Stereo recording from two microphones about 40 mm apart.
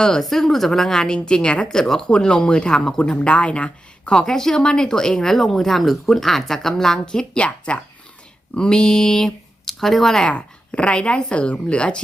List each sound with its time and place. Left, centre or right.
0.2 s speech: centre
2.0 s speech: left
3.1 s speech: left
4.1 s speech: centre
7.3 s speech: left; by 10.2 s centre
10.2 s speech: left